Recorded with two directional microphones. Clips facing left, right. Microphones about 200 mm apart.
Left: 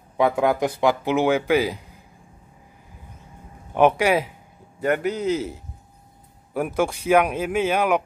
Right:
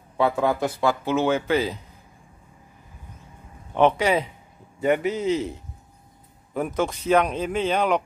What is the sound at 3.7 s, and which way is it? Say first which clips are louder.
Speech: left 2 dB; 10° left (ahead or behind).